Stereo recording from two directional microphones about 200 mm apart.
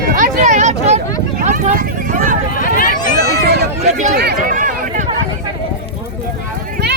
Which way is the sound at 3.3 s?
55° right (ahead or behind).